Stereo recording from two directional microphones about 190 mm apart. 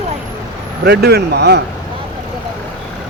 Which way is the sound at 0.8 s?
60° right (ahead or behind).